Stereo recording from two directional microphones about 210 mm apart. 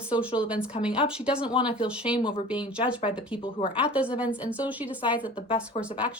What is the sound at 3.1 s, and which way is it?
Speech, 5° right (ahead or behind).